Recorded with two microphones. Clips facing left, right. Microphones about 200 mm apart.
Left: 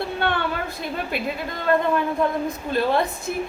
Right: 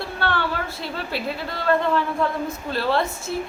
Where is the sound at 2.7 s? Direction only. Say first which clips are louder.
Left 2 dB; 15° left (ahead or behind).